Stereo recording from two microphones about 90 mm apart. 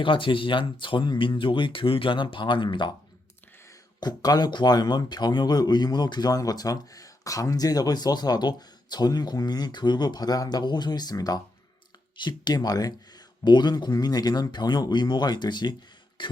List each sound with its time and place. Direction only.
0.0 s speech: 70° left (ahead or behind)
4.0 s speech: 50° left (ahead or behind)
12.1 s speech: 55° left (ahead or behind)
16.2 s beatboxing: 65° left (ahead or behind)